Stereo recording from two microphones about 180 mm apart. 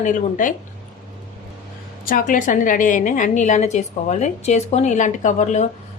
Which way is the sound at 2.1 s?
50° left (ahead or behind).